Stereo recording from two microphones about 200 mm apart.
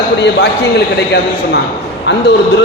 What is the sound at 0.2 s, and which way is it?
Speech, 60° left (ahead or behind).